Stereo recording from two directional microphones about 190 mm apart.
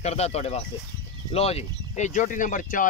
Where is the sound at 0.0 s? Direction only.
35° left (ahead or behind).